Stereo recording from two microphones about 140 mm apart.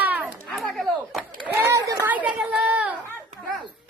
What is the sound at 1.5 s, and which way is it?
Chatter, 15° right (ahead or behind).